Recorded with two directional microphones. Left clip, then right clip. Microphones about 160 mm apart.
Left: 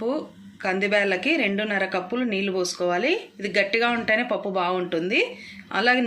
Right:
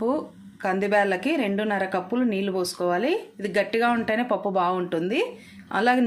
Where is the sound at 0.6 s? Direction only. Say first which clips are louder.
Even; 55° right (ahead or behind).